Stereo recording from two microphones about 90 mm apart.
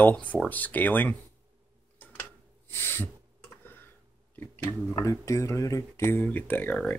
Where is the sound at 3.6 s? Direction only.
25° left (ahead or behind).